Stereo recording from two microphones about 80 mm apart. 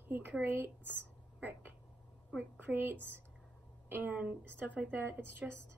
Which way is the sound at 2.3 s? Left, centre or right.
Right.